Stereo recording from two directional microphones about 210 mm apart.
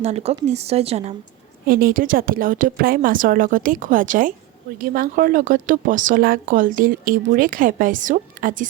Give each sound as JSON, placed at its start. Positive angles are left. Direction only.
{"t": 0.0, "sound": "speech", "side_deg": -30}
{"t": 1.6, "sound": "speech", "side_deg": -45}